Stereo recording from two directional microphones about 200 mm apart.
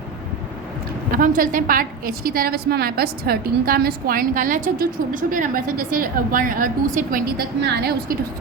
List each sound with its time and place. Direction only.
1.1 s a woman's voice: 45° right (ahead or behind)